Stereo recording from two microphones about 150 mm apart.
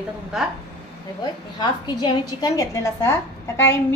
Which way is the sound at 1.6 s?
30° left (ahead or behind).